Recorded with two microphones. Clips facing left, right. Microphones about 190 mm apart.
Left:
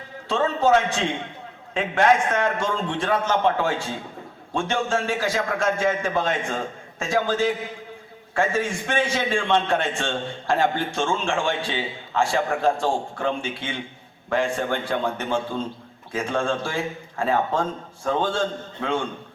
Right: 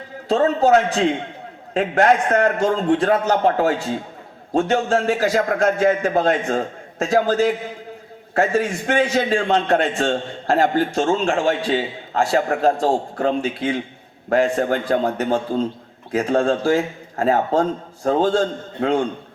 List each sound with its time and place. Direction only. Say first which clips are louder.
0.3 s a man's voice: right 4 dB; 40° right (ahead or behind)